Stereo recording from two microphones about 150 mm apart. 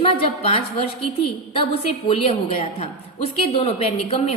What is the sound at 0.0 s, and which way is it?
Speech, 40° left (ahead or behind).